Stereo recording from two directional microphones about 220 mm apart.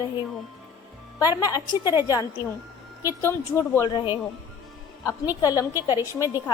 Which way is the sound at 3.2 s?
10° left (ahead or behind).